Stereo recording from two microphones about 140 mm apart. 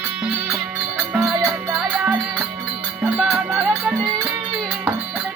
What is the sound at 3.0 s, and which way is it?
Music, 5° right (ahead or behind).